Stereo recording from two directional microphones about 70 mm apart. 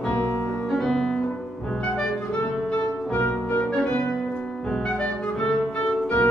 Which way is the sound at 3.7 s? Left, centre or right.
Centre.